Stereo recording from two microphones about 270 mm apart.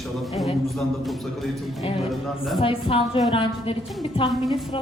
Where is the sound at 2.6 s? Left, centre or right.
Centre.